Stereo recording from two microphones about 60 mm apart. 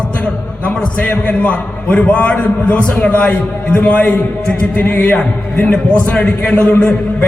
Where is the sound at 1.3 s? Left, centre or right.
Left.